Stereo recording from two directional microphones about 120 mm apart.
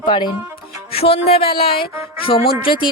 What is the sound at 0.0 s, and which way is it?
Speech, 40° left (ahead or behind).